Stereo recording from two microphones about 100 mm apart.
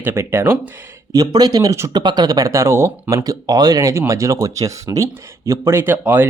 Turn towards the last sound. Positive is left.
turn(degrees=-20)  # may be behind; listen again after turning